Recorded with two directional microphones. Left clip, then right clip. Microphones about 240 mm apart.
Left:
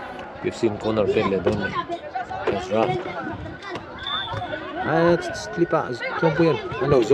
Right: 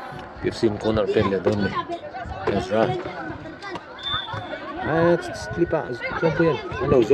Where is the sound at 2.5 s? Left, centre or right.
Centre.